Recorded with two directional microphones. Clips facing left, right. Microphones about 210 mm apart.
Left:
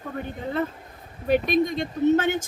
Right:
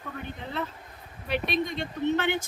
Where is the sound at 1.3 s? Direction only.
45° left (ahead or behind).